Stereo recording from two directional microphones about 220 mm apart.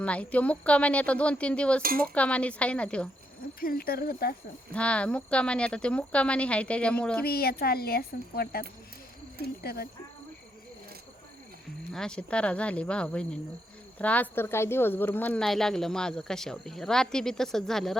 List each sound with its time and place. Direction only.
0.0 s a woman's voice: 5° left (ahead or behind)
3.6 s speech: 40° left (ahead or behind)
4.7 s a woman's voice: 5° left (ahead or behind)
7.3 s speech: 45° left (ahead or behind)
9.6 s speech: 45° left (ahead or behind)
11.9 s a woman's voice: 5° left (ahead or behind)